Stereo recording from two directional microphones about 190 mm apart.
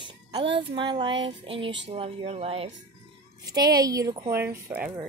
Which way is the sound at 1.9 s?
30° right (ahead or behind).